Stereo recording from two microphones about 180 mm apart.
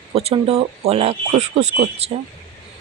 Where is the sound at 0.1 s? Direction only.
35° right (ahead or behind).